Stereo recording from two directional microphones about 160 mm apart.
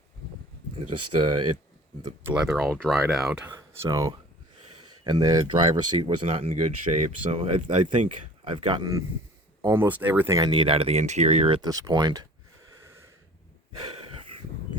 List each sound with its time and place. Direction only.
0.8 s speech: 30° right (ahead or behind)
2.5 s speech: centre (ahead or behind)
3.5 s speech: 20° right (ahead or behind)
13.9 s a sound: 35° right (ahead or behind)